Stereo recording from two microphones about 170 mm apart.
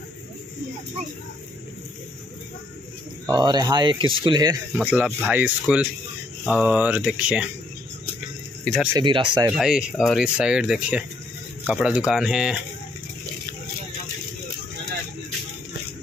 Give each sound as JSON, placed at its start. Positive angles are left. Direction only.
{"t": 3.3, "sound": "speech", "side_deg": -25}
{"t": 4.7, "sound": "speech", "side_deg": -5}
{"t": 8.9, "sound": "speech", "side_deg": -30}
{"t": 9.5, "sound": "speech", "side_deg": -5}